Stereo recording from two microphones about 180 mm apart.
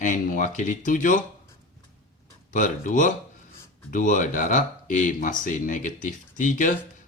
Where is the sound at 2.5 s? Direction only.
45° left (ahead or behind).